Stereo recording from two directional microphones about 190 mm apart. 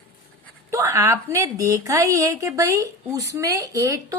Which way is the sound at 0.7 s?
15° right (ahead or behind).